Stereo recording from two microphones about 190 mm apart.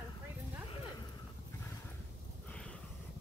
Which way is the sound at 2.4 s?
5° left (ahead or behind).